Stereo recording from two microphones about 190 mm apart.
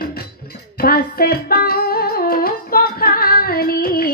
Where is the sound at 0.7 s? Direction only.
55° left (ahead or behind).